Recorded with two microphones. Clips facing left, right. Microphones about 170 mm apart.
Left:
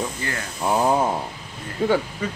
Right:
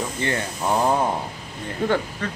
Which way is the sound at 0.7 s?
5° left (ahead or behind).